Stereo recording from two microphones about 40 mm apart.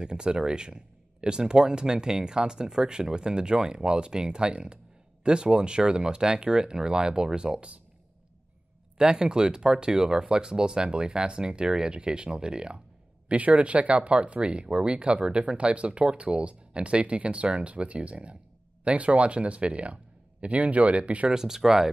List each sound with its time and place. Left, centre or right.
0.0 s speech: right
8.9 s speech: centre
13.3 s speech: right
21.3 s speech: centre